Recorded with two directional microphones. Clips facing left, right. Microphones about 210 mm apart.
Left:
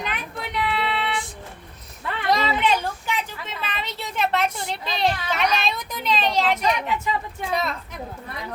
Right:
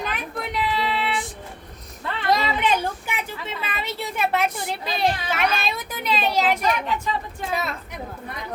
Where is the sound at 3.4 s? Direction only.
10° right (ahead or behind).